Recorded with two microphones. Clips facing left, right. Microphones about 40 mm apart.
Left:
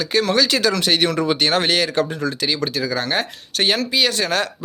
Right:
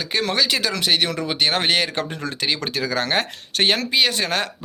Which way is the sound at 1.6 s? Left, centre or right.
Right.